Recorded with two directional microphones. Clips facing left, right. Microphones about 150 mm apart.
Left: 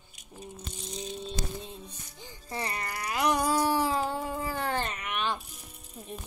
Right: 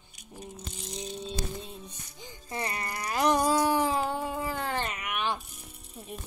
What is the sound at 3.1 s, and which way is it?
Music, 30° right (ahead or behind).